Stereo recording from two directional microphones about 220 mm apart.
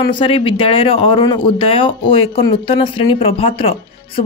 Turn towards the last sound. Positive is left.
turn(degrees=25)  # may be behind; listen again after turning